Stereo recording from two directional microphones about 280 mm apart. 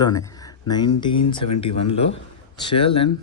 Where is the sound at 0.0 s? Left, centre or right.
Centre.